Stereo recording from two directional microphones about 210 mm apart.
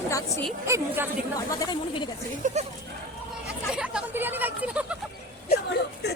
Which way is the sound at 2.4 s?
35° right (ahead or behind).